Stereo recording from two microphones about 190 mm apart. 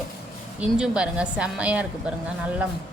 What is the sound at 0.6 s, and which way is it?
A woman's voice, 5° right (ahead or behind).